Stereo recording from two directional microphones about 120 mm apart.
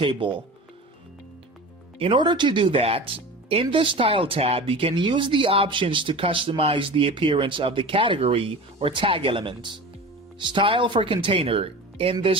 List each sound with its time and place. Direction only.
0.0 s speech: 45° right (ahead or behind)
2.0 s speech: 45° right (ahead or behind)